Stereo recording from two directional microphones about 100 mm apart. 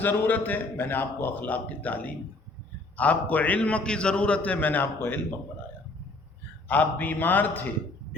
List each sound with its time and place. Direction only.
0.0 s a man's voice: 20° left (ahead or behind)
6.7 s a man's voice: 15° left (ahead or behind)